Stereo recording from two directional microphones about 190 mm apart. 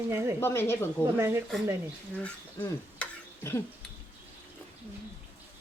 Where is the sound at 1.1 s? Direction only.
10° right (ahead or behind).